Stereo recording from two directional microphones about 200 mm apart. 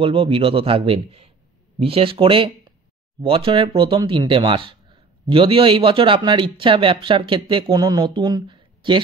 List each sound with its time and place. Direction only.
0.0 s speech: 25° right (ahead or behind)